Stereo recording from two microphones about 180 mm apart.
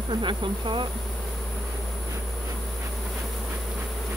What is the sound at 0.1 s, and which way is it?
Insect, 25° right (ahead or behind).